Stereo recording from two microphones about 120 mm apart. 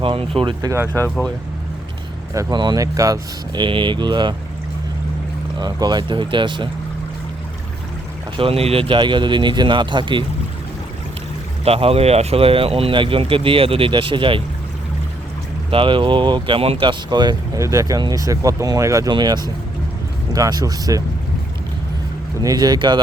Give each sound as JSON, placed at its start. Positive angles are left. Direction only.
{"t": 0.0, "sound": "speech", "side_deg": -50}
{"t": 2.3, "sound": "speech", "side_deg": -25}
{"t": 5.5, "sound": "speech", "side_deg": -35}
{"t": 8.4, "sound": "speech", "side_deg": -55}
{"t": 11.6, "sound": "speech", "side_deg": -55}
{"t": 15.7, "sound": "speech", "side_deg": -45}
{"t": 19.1, "sound": "speech", "side_deg": -35}
{"t": 22.4, "sound": "speech", "side_deg": -35}